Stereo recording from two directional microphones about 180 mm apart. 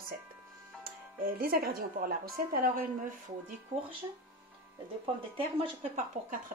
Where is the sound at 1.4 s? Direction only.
55° right (ahead or behind).